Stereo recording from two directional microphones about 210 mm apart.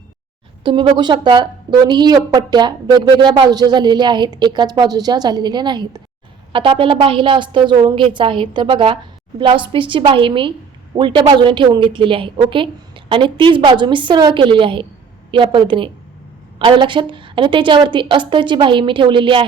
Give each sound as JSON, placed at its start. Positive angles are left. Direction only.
{"t": 0.6, "sound": "a woman's voice", "side_deg": -25}